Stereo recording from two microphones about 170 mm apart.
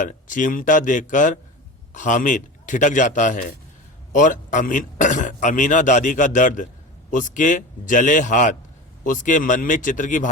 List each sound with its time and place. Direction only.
0.0 s a man's voice: 50° left (ahead or behind)